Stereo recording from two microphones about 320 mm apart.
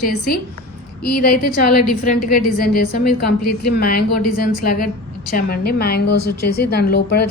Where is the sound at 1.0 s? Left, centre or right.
Left.